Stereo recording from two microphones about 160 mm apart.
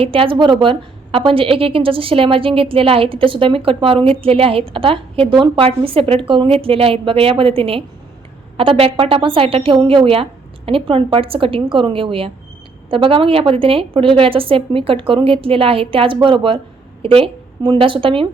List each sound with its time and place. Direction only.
0.0 s a woman's voice: 35° right (ahead or behind)